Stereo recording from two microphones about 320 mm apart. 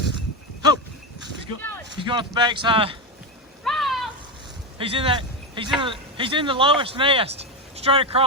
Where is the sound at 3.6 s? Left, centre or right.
Centre.